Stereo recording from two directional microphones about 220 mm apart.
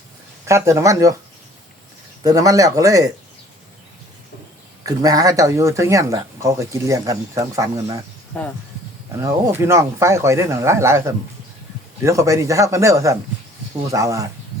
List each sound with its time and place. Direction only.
0.4 s speech: 15° right (ahead or behind)
2.2 s speech: 15° right (ahead or behind)
4.9 s speech: 15° right (ahead or behind)
8.3 s speech: 5° left (ahead or behind)
9.2 s speech: 15° right (ahead or behind)